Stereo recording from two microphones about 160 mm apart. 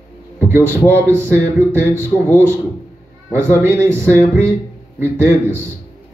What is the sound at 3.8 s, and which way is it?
Speech, 15° right (ahead or behind).